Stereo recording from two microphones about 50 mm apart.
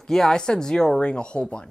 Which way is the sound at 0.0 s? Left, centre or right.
Centre.